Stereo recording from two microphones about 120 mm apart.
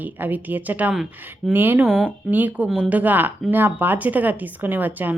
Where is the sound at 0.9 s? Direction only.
Centre (ahead or behind).